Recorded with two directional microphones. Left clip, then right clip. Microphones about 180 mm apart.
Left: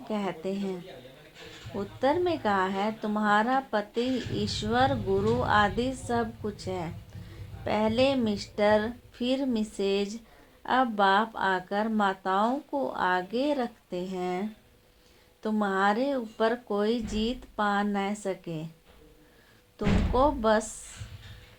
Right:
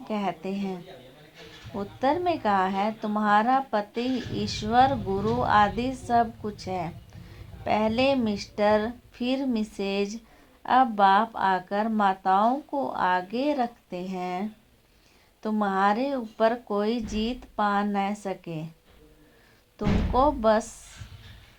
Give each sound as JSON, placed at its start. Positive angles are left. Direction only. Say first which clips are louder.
{"t": 0.1, "sound": "speech", "louder": "right 2 dB", "side_deg": -40}
{"t": 15.4, "sound": "speech", "louder": "right 2 dB", "side_deg": -40}
{"t": 19.8, "sound": "speech", "louder": "right 2 dB", "side_deg": -40}